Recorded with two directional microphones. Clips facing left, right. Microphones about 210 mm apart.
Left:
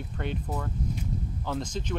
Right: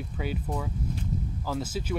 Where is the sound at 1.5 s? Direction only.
5° right (ahead or behind).